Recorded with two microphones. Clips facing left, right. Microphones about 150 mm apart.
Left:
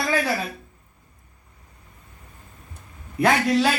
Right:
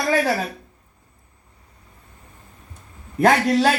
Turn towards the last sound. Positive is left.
turn(degrees=-40)  # may be behind; listen again after turning